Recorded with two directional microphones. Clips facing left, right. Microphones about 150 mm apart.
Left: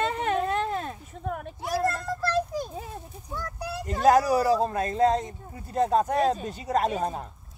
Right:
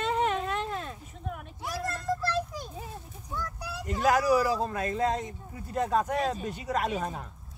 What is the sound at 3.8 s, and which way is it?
Speech, 35° left (ahead or behind).